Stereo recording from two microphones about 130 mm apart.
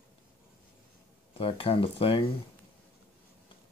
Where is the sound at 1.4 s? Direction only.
45° left (ahead or behind).